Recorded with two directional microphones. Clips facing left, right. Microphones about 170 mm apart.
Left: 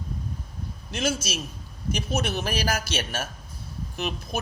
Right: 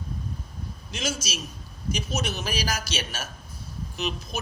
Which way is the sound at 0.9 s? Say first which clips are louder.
Left 4 dB; 55° left (ahead or behind).